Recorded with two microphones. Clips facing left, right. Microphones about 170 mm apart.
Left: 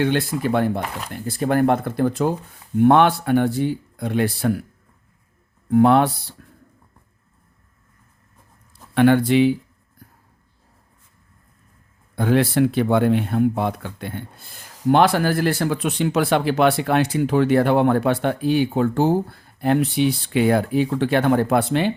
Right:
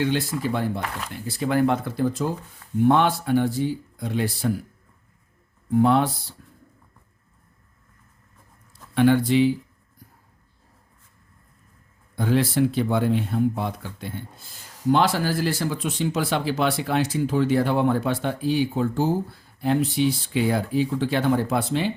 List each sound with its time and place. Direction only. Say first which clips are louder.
0.0 s speech: left 3 dB; 60° left (ahead or behind)
5.7 s speech: left 4 dB; 65° left (ahead or behind)
9.0 s speech: left 3 dB; 60° left (ahead or behind)
12.1 s speech: left 4 dB; 60° left (ahead or behind)